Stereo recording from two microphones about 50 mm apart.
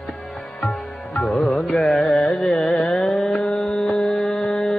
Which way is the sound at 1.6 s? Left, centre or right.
Centre.